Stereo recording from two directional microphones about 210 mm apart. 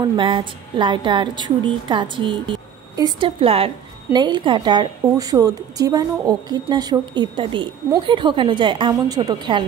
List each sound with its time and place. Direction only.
0.0 s speech: 20° right (ahead or behind)